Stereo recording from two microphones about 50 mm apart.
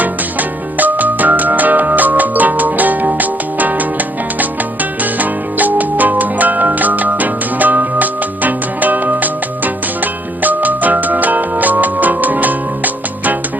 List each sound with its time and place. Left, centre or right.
0.0 s music: right